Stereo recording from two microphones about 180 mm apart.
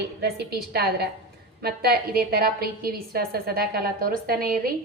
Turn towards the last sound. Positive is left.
turn(degrees=-55)  # may be behind; listen again after turning